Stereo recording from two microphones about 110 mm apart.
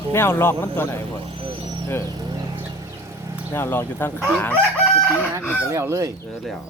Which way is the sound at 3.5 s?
20° left (ahead or behind).